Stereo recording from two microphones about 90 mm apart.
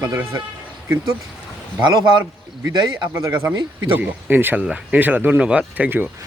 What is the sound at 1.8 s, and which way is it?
Speech, 50° right (ahead or behind).